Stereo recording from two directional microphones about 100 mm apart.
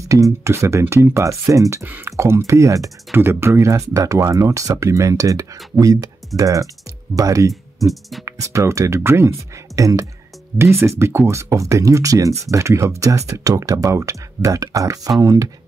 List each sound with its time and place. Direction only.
0.1 s speech: 30° right (ahead or behind)
3.2 s speech: 20° right (ahead or behind)
7.8 s beatboxing: centre (ahead or behind)
8.3 s speech: 30° right (ahead or behind)